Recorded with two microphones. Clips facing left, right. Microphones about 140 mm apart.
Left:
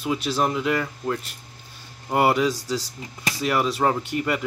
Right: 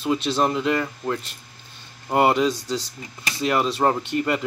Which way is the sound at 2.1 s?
20° right (ahead or behind).